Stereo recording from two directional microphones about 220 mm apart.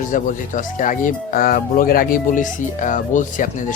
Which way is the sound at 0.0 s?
35° left (ahead or behind).